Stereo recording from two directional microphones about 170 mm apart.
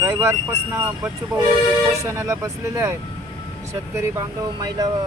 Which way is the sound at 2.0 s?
15° right (ahead or behind).